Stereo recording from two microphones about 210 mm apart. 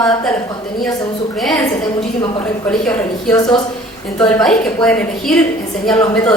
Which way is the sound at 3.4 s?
20° left (ahead or behind).